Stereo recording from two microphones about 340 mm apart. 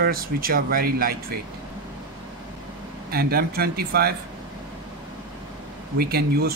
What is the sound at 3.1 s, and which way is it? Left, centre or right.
Speech, right.